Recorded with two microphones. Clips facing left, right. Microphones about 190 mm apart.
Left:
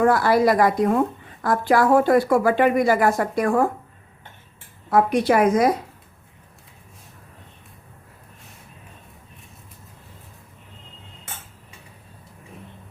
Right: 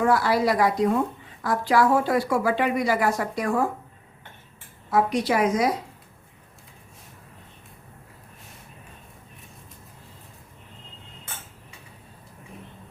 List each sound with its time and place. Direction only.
0.0 s a woman's voice: 50° left (ahead or behind)
4.9 s a woman's voice: 55° left (ahead or behind)